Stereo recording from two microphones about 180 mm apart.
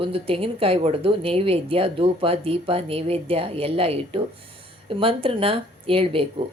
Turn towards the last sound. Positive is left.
turn(degrees=-30)  # may be behind; listen again after turning